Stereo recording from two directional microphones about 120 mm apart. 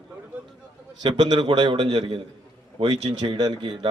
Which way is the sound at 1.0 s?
35° right (ahead or behind).